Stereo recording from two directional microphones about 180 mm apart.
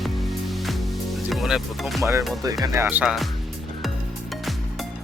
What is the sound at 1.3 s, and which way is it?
Speech, centre (ahead or behind).